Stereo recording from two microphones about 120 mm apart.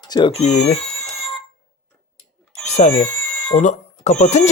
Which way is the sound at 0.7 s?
5° left (ahead or behind).